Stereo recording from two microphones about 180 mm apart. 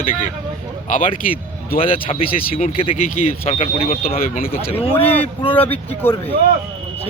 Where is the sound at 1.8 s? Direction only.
30° left (ahead or behind).